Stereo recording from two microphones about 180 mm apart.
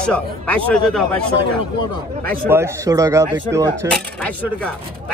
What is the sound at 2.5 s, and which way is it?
Speech, 15° right (ahead or behind).